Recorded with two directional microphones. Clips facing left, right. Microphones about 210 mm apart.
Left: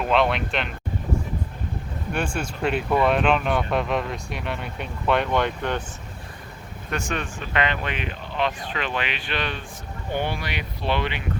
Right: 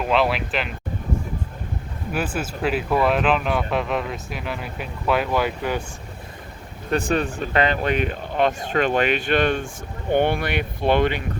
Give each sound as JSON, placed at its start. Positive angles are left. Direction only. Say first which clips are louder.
{"t": 0.0, "sound": "speech", "louder": "right 1 dB", "side_deg": 0}
{"t": 2.1, "sound": "speech", "louder": "right 2 dB", "side_deg": -5}
{"t": 6.9, "sound": "speech", "louder": "right 7 dB", "side_deg": -30}